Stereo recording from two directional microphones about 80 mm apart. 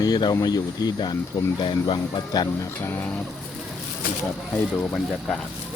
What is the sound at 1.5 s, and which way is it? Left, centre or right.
Speech, left.